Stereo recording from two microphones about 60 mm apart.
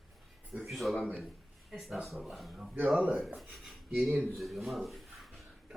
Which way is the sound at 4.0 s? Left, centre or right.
Right.